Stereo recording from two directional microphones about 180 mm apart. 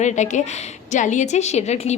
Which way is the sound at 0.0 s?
40° left (ahead or behind).